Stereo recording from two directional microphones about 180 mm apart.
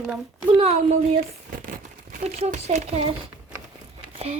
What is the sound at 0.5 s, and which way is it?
Speech, 35° right (ahead or behind).